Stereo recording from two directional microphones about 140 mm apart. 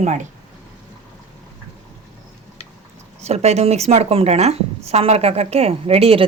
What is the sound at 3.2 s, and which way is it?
A woman's voice, 50° right (ahead or behind).